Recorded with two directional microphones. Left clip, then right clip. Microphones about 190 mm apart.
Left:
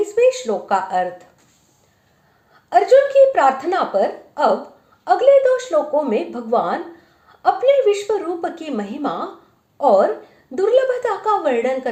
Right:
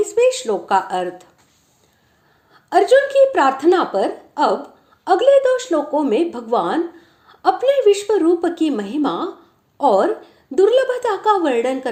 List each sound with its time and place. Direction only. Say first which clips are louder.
0.2 s speech: left 1 dB; 30° right (ahead or behind)
2.6 s a woman's voice: left 1 dB; 30° right (ahead or behind)